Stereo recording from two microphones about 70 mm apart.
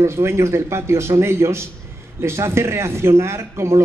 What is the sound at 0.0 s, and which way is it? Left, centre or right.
Speech, right.